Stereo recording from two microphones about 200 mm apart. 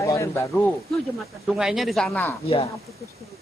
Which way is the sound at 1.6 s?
Centre (ahead or behind).